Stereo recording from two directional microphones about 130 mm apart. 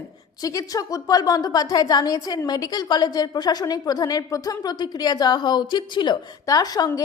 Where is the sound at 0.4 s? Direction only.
25° left (ahead or behind).